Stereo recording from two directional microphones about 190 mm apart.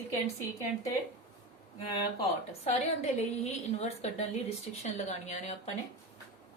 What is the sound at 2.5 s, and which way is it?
A woman's voice, 35° left (ahead or behind).